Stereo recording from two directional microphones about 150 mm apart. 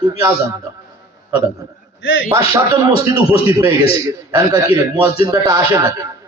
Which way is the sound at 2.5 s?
20° right (ahead or behind).